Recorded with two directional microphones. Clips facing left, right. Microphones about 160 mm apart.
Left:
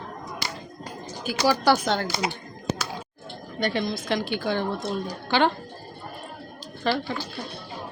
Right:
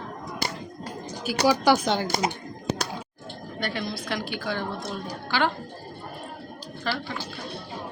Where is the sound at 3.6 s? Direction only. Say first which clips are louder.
Left 5 dB; 20° left (ahead or behind).